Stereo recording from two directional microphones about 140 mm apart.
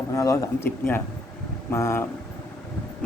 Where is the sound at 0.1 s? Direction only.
25° left (ahead or behind).